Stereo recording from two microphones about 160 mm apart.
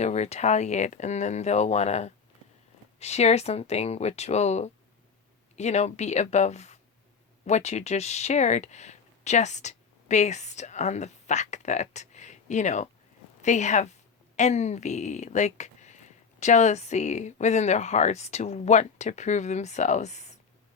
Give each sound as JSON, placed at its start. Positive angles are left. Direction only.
{"t": 0.0, "sound": "speech", "side_deg": 45}